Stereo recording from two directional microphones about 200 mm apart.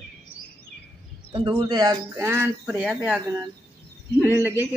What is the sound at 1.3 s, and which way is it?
Speech, 25° right (ahead or behind).